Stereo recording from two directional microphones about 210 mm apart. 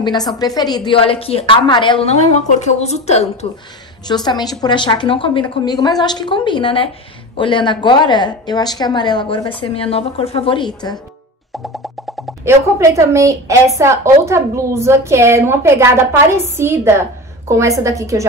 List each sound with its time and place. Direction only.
0.0 s a woman's voice: 20° left (ahead or behind)
4.1 s a woman's voice: 20° left (ahead or behind)
12.4 s a woman's voice: 15° right (ahead or behind)